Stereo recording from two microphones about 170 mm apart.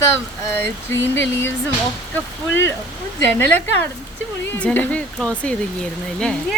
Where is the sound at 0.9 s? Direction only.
90° left.